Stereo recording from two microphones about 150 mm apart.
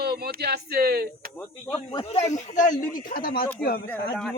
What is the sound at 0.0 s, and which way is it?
Speech, 90° right.